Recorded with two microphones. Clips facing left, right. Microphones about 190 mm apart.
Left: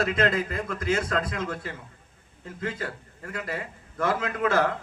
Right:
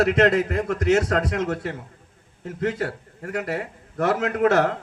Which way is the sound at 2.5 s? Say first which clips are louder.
Right 7 dB; 65° right (ahead or behind).